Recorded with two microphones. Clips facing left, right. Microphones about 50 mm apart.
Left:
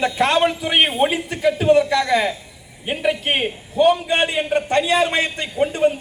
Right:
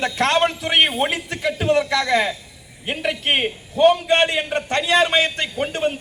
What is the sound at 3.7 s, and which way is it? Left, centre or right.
A man's voice, right.